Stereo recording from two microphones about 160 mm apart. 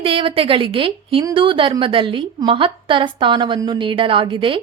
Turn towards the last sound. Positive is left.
turn(degrees=-30)  # may be behind; listen again after turning